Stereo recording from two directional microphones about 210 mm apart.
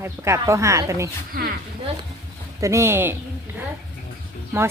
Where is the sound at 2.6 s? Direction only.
15° right (ahead or behind).